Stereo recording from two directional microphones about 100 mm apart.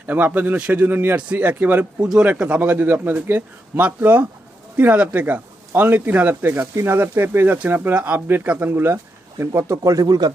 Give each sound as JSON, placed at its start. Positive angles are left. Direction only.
{"t": 0.1, "sound": "a man's voice", "side_deg": -15}